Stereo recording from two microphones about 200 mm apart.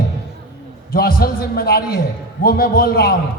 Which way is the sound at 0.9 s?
50° left (ahead or behind).